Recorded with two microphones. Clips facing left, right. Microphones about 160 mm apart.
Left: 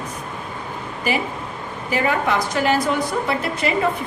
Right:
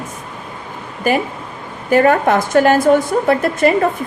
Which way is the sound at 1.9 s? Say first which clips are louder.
Right 8 dB; 50° right (ahead or behind).